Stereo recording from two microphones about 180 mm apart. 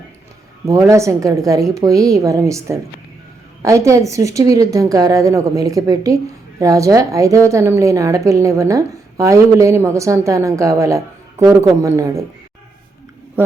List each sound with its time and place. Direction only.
0.7 s a woman's voice: 15° right (ahead or behind)